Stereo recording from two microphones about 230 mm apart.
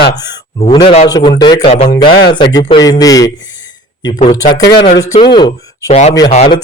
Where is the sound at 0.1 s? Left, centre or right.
Centre.